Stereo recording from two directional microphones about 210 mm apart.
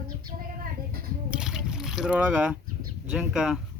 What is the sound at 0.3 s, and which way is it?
Child singing, 45° right (ahead or behind).